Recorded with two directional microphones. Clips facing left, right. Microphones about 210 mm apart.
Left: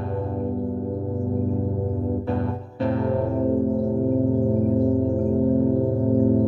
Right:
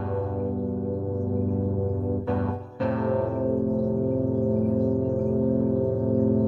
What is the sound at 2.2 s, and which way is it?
Music, 30° left (ahead or behind).